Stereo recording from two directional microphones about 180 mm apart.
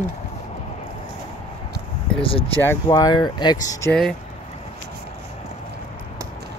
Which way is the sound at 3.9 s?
Centre (ahead or behind).